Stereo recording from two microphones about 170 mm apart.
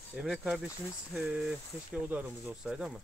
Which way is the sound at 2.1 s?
10° right (ahead or behind).